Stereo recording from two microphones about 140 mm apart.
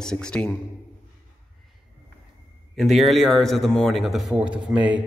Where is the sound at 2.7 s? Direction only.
Centre (ahead or behind).